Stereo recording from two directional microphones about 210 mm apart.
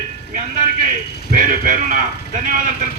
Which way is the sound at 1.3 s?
40° right (ahead or behind).